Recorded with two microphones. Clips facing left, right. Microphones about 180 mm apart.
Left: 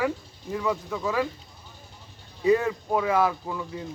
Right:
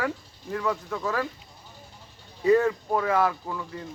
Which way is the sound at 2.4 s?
15° left (ahead or behind).